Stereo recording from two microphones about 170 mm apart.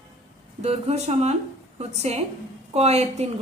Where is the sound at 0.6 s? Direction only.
40° right (ahead or behind).